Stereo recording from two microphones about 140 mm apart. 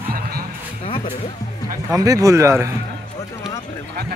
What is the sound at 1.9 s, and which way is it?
Speech, 25° right (ahead or behind).